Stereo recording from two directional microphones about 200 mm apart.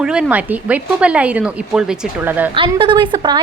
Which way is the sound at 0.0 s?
5° right (ahead or behind).